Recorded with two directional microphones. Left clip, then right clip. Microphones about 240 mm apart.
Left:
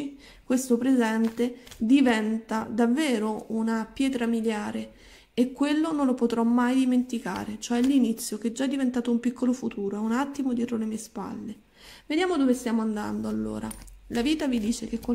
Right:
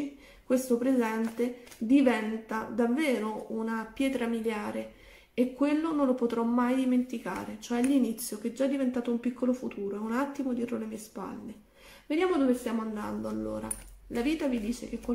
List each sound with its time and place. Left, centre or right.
0.5 s speech: left